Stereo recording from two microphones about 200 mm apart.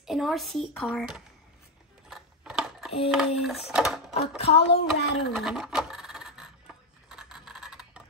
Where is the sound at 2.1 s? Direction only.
5° right (ahead or behind).